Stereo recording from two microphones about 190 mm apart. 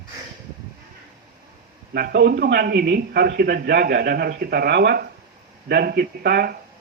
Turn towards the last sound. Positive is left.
turn(degrees=-55)  # may be behind; listen again after turning